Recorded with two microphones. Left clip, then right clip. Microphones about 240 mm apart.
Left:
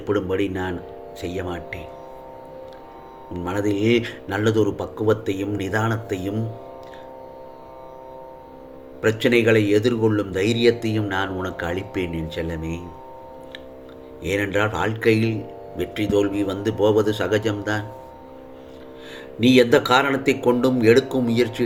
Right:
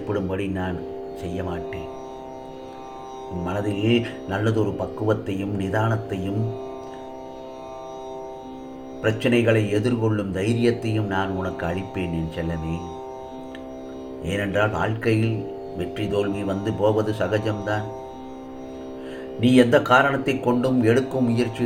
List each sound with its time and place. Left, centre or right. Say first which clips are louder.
0.1 s a man's voice: left 5 dB; left
3.4 s a man's voice: left 4 dB; left
9.0 s a man's voice: left 3 dB; left
14.3 s a man's voice: left 1 dB; left
19.4 s a man's voice: left 2 dB; left